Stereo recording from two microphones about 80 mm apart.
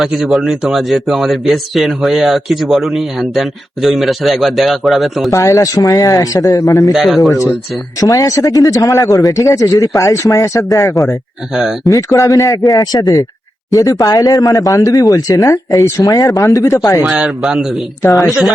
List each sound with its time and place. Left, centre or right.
0.0 s speech: centre
5.3 s speech: left
6.9 s speech: centre
7.9 s speech: left
17.1 s speech: centre